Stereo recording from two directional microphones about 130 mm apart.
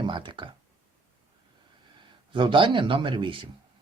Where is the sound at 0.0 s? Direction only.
35° right (ahead or behind).